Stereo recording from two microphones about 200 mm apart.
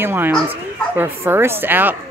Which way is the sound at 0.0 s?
10° right (ahead or behind).